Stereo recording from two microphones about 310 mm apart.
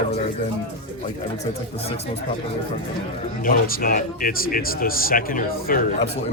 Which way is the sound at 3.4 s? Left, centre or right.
Left.